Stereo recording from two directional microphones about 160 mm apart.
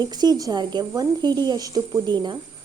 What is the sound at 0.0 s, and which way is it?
A woman's voice, 25° right (ahead or behind).